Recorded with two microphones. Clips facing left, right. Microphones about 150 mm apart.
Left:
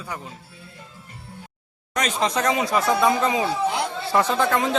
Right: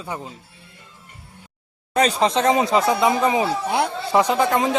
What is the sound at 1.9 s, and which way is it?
Speech, 35° right (ahead or behind).